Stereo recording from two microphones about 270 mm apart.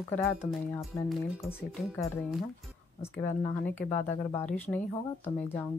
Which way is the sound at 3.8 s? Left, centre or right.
Left.